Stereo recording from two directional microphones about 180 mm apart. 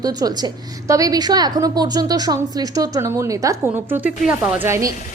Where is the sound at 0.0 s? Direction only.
20° right (ahead or behind).